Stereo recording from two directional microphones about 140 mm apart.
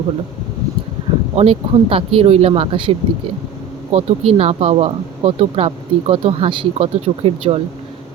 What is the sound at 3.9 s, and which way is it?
Speech, 45° right (ahead or behind).